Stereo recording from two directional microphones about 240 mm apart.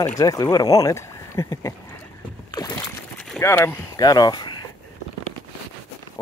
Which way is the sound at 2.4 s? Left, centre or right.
Centre.